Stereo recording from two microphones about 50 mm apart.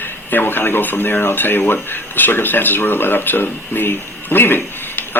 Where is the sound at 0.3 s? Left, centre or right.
Left.